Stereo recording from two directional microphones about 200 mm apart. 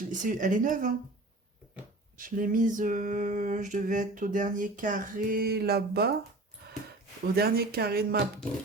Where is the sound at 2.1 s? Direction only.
45° right (ahead or behind).